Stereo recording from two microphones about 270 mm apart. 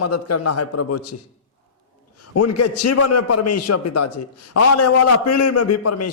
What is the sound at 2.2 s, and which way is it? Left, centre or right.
A man's voice, left.